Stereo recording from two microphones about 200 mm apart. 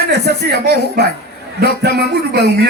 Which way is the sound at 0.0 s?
55° left (ahead or behind).